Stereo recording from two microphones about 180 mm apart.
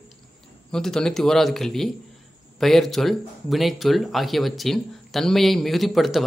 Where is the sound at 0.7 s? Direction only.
5° left (ahead or behind).